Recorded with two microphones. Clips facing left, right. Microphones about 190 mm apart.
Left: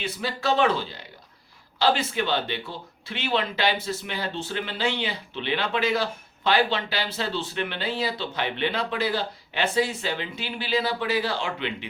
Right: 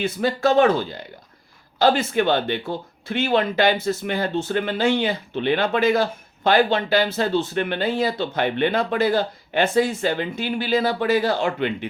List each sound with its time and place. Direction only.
0.0 s speech: 50° right (ahead or behind)